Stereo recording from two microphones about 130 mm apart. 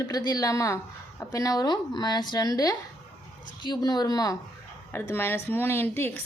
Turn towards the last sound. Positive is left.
turn(degrees=15)  # may be behind; listen again after turning